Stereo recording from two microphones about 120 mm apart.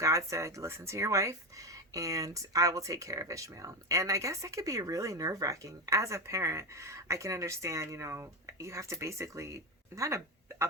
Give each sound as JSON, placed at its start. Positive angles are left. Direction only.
{"t": 0.0, "sound": "speech", "side_deg": -25}